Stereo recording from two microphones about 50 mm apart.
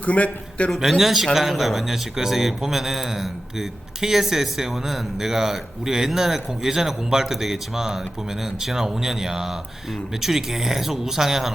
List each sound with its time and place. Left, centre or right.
0.0 s a man's voice: left
0.8 s speech: centre